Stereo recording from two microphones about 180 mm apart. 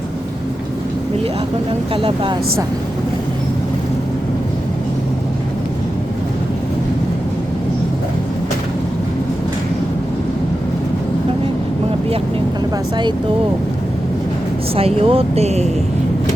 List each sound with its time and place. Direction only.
2.0 s speech: 30° right (ahead or behind)
14.8 s speech: 30° right (ahead or behind)